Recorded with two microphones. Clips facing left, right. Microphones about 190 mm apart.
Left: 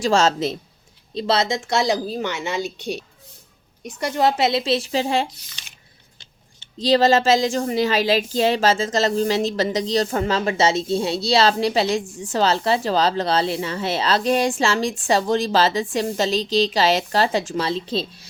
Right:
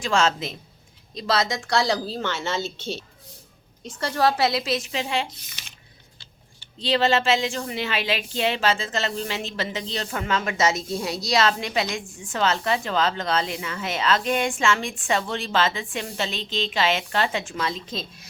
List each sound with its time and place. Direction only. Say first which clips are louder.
0.0 s speech: left 5 dB; 40° left (ahead or behind)
1.1 s a woman's voice: left 4 dB; 25° left (ahead or behind)
6.7 s speech: left 5 dB; 40° left (ahead or behind)